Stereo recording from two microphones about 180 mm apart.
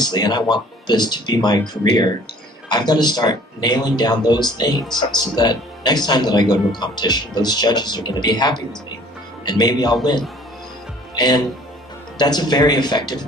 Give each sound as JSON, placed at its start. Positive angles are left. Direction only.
{"t": 0.0, "sound": "speech", "side_deg": 25}